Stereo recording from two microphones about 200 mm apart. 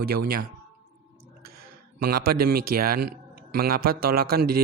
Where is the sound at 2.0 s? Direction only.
50° right (ahead or behind).